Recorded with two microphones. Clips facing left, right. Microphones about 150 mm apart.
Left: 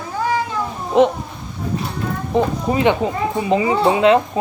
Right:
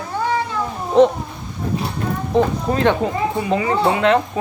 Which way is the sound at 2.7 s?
10° left (ahead or behind).